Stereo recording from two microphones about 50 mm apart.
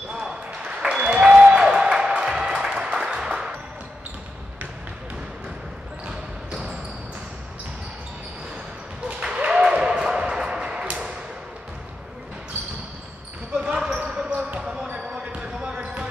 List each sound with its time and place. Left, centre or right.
0.1 s applause: centre
6.0 s basketball bounce: right
9.0 s a sound: centre
13.6 s basketball bounce: centre